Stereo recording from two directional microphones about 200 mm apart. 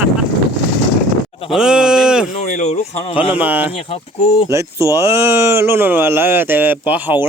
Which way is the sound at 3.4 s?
10° right (ahead or behind).